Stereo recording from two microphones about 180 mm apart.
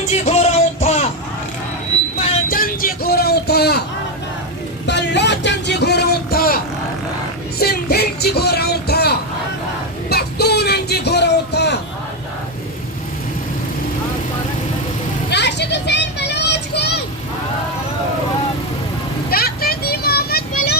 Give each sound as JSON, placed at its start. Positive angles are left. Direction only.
{"t": 0.1, "sound": "music", "side_deg": 35}
{"t": 2.1, "sound": "vehicle", "side_deg": 35}
{"t": 2.5, "sound": "vehicle", "side_deg": 50}
{"t": 4.9, "sound": "vehicle", "side_deg": 75}
{"t": 7.6, "sound": "music", "side_deg": 60}
{"t": 10.1, "sound": "a sound", "side_deg": 60}
{"t": 15.3, "sound": "vehicle", "side_deg": 70}
{"t": 19.3, "sound": "vehicle", "side_deg": 60}